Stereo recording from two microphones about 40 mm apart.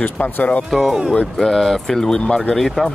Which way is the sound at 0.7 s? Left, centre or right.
Centre.